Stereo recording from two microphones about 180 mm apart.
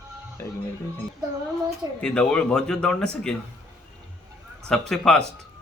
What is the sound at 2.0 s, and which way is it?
Speech, 5° left (ahead or behind).